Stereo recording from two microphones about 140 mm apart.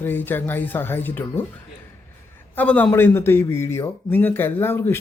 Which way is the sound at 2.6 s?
10° left (ahead or behind).